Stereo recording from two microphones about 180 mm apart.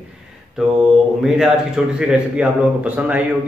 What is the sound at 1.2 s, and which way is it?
A man's voice, 5° right (ahead or behind).